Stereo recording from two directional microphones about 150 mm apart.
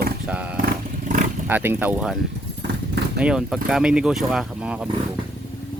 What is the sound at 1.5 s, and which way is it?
Speech, 10° right (ahead or behind).